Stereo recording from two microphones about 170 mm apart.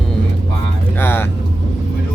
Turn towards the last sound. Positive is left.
turn(degrees=15)  # may be behind; listen again after turning